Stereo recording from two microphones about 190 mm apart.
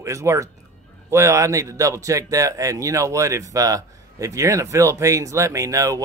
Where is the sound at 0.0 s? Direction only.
15° right (ahead or behind).